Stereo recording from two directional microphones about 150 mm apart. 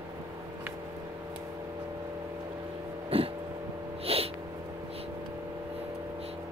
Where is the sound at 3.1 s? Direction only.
40° right (ahead or behind).